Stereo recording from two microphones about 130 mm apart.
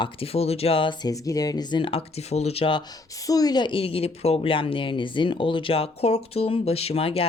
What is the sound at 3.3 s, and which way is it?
A woman's voice, 30° left (ahead or behind).